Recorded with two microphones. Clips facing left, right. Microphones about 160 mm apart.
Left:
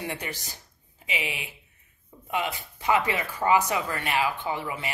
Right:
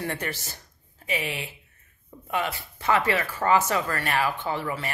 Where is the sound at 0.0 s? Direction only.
15° left (ahead or behind).